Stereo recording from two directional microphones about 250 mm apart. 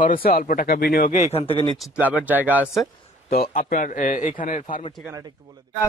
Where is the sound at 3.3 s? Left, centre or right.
Left.